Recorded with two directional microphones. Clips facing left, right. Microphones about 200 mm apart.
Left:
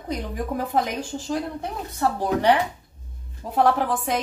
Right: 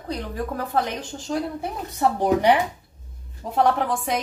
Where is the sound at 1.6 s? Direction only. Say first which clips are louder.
Right 2 dB; 15° right (ahead or behind).